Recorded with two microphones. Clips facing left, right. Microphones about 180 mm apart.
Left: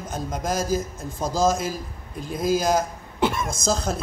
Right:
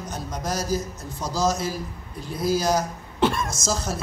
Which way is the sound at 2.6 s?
50° left (ahead or behind).